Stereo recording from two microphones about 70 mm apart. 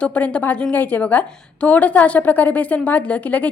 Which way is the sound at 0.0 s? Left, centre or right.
Centre.